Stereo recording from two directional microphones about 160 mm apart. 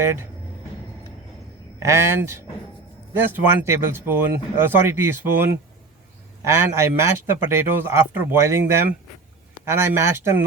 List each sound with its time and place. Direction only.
0.0 s speech: 15° right (ahead or behind)
1.8 s speech: 15° right (ahead or behind)